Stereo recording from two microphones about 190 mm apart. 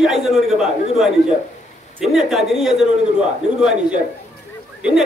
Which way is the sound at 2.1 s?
Centre (ahead or behind).